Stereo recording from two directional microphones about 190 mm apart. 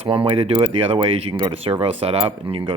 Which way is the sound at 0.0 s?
25° right (ahead or behind).